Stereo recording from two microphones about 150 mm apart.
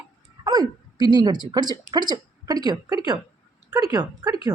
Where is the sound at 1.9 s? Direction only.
25° right (ahead or behind).